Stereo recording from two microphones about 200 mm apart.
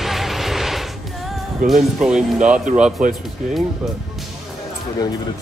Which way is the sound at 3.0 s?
40° right (ahead or behind).